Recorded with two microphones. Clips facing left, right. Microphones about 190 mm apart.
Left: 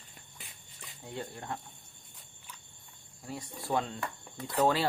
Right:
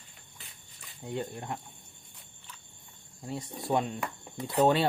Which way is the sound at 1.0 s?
20° right (ahead or behind).